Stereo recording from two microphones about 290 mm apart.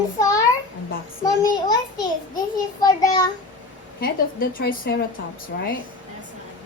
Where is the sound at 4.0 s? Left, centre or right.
Left.